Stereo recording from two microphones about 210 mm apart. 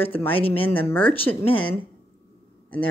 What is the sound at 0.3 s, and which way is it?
Speech, 25° left (ahead or behind).